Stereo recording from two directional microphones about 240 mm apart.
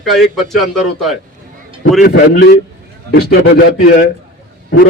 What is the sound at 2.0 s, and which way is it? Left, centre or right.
A man's voice, left.